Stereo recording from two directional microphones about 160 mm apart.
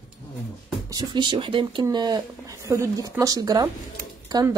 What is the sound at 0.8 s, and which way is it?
A woman's voice, 25° right (ahead or behind).